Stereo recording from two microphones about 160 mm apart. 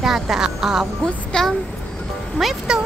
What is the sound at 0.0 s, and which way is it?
A child's voice, centre (ahead or behind).